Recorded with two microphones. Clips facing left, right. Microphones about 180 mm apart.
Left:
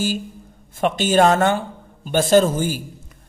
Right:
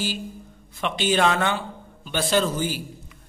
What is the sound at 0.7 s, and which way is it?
Speech, 45° left (ahead or behind).